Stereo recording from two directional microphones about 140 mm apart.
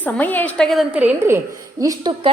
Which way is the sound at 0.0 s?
10° left (ahead or behind).